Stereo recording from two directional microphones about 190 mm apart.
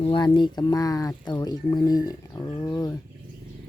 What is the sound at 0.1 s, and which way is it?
Speech, 25° left (ahead or behind).